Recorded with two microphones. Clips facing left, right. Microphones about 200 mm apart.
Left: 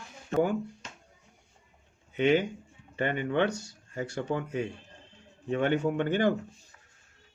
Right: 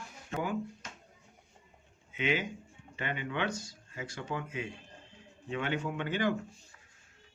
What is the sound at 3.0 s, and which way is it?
Speech, 50° left (ahead or behind).